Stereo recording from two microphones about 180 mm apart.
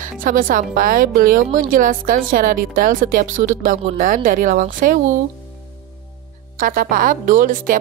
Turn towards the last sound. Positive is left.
turn(degrees=-50)  # may be behind; listen again after turning